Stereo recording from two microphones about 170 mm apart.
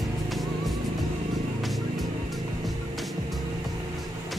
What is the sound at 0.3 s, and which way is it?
Vehicle, centre (ahead or behind).